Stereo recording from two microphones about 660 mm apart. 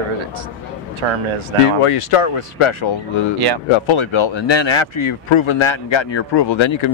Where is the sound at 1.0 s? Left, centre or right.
Right.